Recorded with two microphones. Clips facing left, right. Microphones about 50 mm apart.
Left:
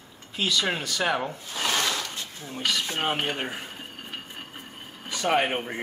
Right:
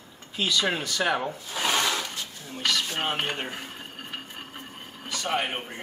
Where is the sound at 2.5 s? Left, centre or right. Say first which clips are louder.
Even; centre.